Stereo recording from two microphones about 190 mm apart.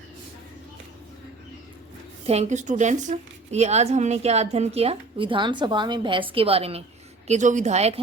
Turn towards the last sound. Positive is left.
turn(degrees=-35)  # may be behind; listen again after turning